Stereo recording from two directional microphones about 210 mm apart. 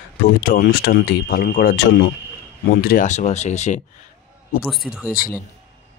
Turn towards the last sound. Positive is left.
turn(degrees=0)  # may be behind; listen again after turning